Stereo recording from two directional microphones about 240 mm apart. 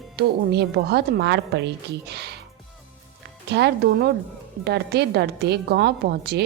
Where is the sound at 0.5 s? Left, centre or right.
Right.